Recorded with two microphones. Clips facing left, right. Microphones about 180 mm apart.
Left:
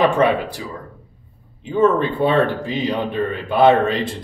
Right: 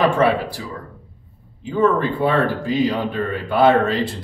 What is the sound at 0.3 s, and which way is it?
A man's voice, 20° left (ahead or behind).